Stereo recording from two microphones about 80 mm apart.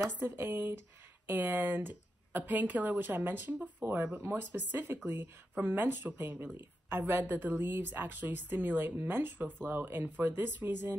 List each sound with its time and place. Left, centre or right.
0.2 s a woman's voice: right
3.9 s a woman's voice: right